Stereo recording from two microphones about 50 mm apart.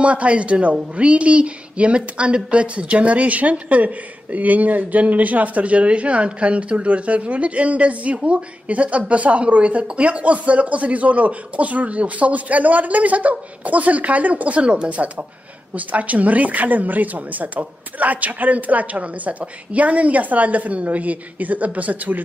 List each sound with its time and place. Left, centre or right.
0.0 s a woman's voice: right